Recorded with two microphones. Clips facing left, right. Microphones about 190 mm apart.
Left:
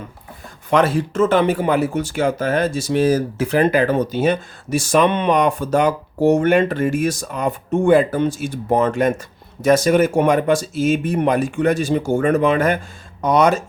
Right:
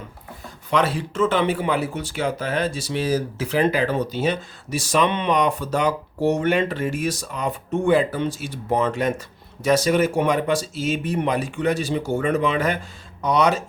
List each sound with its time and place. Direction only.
0.7 s speech: 45° left (ahead or behind)